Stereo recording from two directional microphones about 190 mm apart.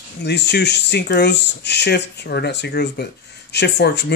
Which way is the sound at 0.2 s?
60° left (ahead or behind).